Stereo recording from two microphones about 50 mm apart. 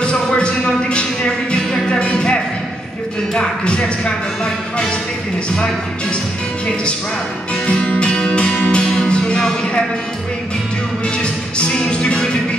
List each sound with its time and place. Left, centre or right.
0.0 s music: centre
3.3 s speech: centre
7.6 s music: left
11.5 s music: left